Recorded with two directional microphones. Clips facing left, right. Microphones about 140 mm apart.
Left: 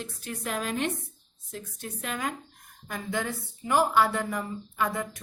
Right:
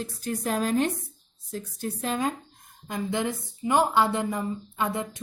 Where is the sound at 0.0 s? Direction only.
35° right (ahead or behind).